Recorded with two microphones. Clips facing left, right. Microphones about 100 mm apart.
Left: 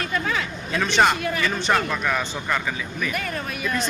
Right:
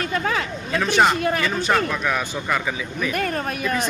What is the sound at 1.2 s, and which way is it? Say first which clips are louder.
Speech: right 3 dB; 45° right (ahead or behind).